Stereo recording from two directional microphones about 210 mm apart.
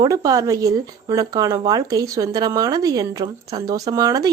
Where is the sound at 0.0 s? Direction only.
15° right (ahead or behind).